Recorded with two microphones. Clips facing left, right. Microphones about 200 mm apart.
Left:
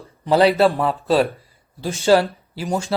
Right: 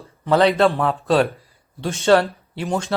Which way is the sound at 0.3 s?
5° left (ahead or behind).